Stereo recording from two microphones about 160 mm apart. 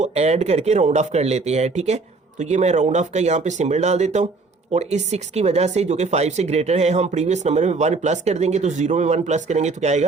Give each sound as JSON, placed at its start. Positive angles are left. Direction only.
{"t": 0.0, "sound": "speech", "side_deg": -40}